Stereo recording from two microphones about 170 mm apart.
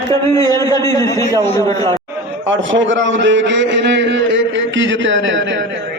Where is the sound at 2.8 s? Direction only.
90° right.